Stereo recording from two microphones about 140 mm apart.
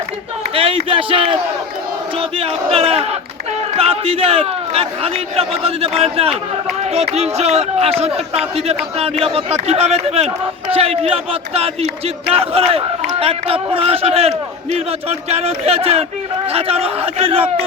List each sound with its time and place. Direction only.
0.5 s speech: 40° right (ahead or behind)